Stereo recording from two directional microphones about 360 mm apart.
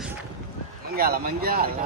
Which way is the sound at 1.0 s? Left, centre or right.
Right.